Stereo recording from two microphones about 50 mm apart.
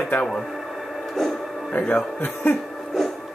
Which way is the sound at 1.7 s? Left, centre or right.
Left.